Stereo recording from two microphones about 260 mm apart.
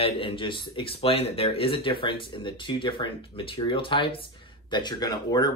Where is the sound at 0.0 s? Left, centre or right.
Left.